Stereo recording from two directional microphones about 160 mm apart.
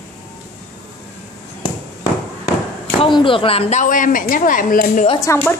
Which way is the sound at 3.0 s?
30° left (ahead or behind).